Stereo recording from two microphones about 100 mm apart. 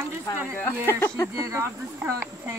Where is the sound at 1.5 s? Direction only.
30° right (ahead or behind).